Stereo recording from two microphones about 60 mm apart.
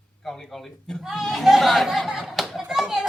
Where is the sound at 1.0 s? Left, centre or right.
Centre.